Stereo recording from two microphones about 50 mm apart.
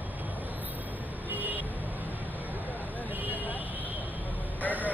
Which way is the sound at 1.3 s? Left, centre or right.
Right.